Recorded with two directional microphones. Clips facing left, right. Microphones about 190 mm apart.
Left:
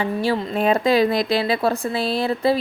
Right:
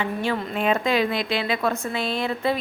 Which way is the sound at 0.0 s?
35° left (ahead or behind).